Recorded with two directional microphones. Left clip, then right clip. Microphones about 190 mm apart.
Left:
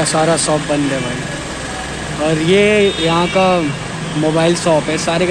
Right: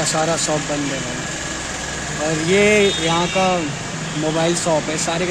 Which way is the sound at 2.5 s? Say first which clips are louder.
Left 2 dB; centre (ahead or behind).